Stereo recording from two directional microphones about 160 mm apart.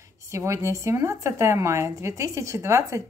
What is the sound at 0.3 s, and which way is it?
A woman's voice, 20° right (ahead or behind).